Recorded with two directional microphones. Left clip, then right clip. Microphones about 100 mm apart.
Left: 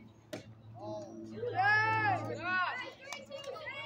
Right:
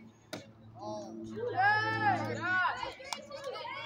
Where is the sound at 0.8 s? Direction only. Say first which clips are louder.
Right 2 dB; 20° left (ahead or behind).